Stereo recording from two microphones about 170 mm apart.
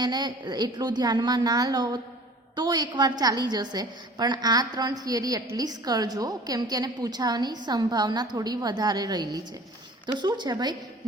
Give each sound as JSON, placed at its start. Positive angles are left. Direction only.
{"t": 0.0, "sound": "a woman's voice", "side_deg": -25}